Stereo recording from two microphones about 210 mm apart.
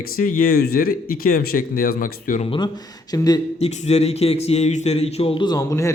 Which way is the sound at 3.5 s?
30° left (ahead or behind).